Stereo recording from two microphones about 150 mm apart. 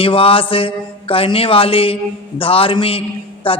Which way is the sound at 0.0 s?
40° left (ahead or behind).